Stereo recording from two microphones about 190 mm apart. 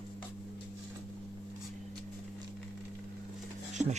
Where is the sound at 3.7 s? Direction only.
40° right (ahead or behind).